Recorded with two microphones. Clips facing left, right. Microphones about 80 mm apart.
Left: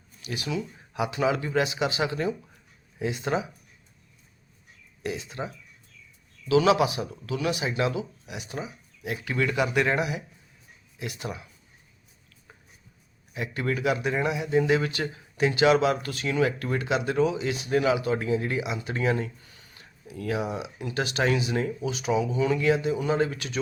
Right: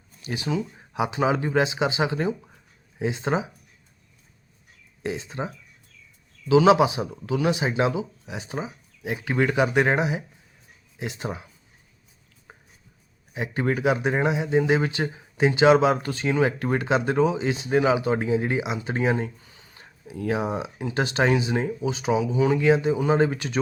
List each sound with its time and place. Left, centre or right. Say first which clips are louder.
0.2 s speech: right 4 dB; right
5.0 s speech: right 3 dB; right
6.5 s speech: right 4 dB; right
13.3 s speech: right 4 dB; right